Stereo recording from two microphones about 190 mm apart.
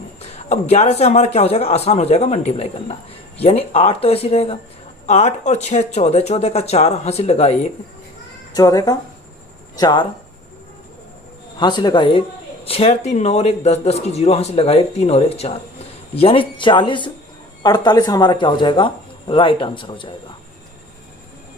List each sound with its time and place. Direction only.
0.2 s speech: 35° left (ahead or behind)
8.5 s speech: 20° left (ahead or behind)
11.6 s speech: 25° left (ahead or behind)